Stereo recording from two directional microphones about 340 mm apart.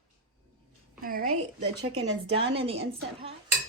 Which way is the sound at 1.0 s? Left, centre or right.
Right.